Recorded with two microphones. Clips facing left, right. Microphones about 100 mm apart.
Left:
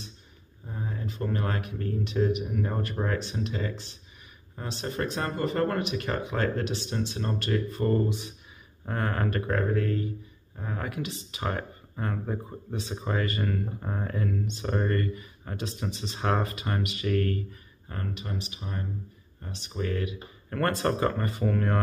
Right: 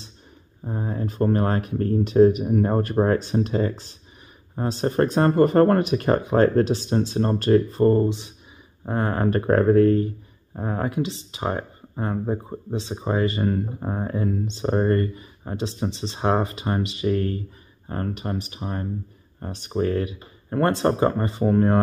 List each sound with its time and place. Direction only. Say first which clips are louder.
0.7 s speech: right 8 dB; 40° right (ahead or behind); by 17.4 s 25° right (ahead or behind)
17.8 s speech: right 8 dB; 40° right (ahead or behind)